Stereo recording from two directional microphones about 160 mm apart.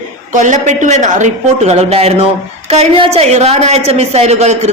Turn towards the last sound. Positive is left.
turn(degrees=-45)  # may be behind; listen again after turning